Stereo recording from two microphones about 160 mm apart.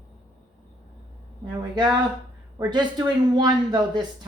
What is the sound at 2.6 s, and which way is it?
Speech, 25° right (ahead or behind).